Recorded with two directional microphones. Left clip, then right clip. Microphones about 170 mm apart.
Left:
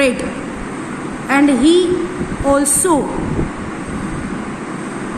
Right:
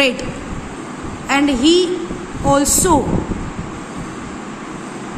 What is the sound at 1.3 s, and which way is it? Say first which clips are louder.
A woman's voice: left 2 dB; 10° right (ahead or behind).